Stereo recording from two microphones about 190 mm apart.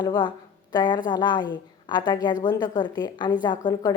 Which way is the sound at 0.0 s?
25° left (ahead or behind).